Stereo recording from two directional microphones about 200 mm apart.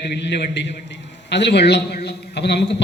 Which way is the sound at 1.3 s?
60° left (ahead or behind).